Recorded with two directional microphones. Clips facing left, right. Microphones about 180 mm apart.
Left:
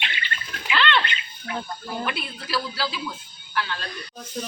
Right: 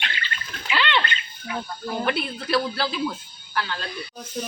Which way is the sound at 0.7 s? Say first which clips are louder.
Left 1 dB; 15° right (ahead or behind).